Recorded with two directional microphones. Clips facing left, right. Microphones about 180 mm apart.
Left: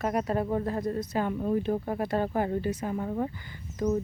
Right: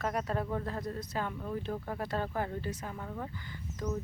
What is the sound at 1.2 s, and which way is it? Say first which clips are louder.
Speech: left 9 dB; 25° left (ahead or behind).